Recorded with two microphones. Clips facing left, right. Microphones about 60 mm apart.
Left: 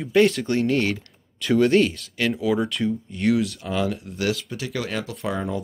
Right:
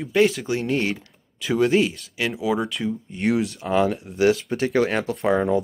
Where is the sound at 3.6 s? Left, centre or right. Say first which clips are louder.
Right 4 dB; right.